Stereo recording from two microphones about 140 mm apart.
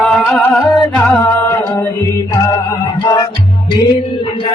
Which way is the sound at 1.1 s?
15° left (ahead or behind).